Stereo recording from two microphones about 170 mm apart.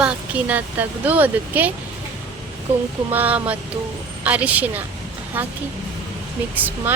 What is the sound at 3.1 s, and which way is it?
Speech, 10° right (ahead or behind).